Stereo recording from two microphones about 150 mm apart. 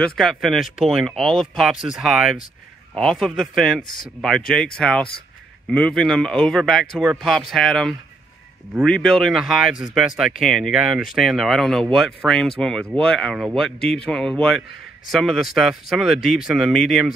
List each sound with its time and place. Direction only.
0.0 s speech: centre (ahead or behind)